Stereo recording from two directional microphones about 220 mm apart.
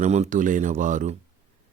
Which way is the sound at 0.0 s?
30° right (ahead or behind).